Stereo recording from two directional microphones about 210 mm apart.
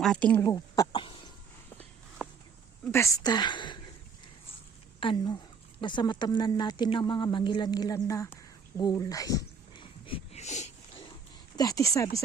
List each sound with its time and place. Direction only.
0.0 s speech: 5° left (ahead or behind)
0.4 s cough: 15° left (ahead or behind)
2.8 s speech: 10° left (ahead or behind)
4.9 s speech: 25° left (ahead or behind)
8.8 s a sound: 15° left (ahead or behind); by 11.0 s 35° left (ahead or behind)
11.5 s speech: 15° left (ahead or behind)